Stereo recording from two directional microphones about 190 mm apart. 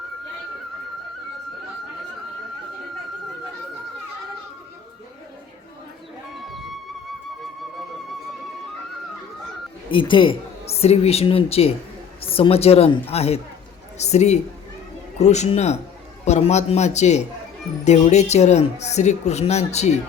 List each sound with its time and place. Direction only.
6.3 s sheep: centre (ahead or behind)
9.9 s speech: 25° left (ahead or behind)